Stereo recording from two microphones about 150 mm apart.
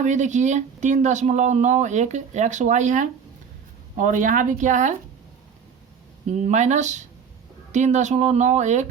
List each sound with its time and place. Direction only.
0.0 s speech: 55° right (ahead or behind)
6.2 s speech: 50° right (ahead or behind)